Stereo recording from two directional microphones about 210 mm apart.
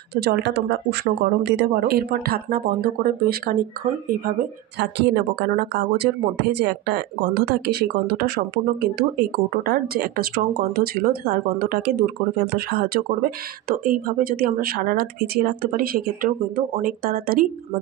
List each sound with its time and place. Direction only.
0.1 s speech: 50° right (ahead or behind)
4.7 s speech: 55° right (ahead or behind)